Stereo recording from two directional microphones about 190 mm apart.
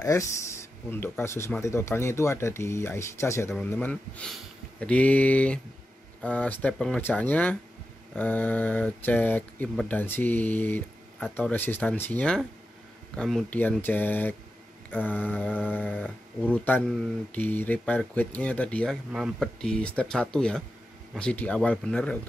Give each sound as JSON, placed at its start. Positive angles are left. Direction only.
{"t": 0.0, "sound": "speech", "side_deg": 15}